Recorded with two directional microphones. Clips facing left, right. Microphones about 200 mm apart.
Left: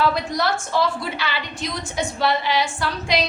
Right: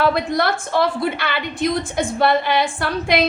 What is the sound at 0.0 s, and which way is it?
A woman's voice, 60° right (ahead or behind).